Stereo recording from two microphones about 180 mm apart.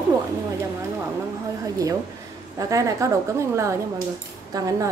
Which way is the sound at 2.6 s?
20° right (ahead or behind).